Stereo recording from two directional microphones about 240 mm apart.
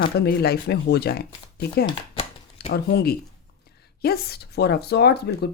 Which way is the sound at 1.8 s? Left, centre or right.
Left.